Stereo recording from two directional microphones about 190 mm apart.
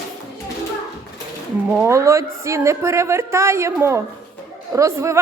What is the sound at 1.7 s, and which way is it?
Speech, 10° right (ahead or behind).